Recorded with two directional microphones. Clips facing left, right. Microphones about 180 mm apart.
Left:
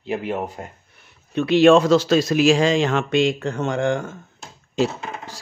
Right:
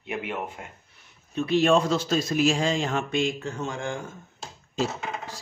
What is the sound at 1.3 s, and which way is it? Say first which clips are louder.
Speech: left 7 dB; 80° left.